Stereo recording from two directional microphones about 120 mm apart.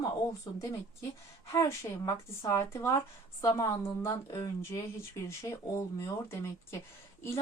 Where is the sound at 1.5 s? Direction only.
25° left (ahead or behind).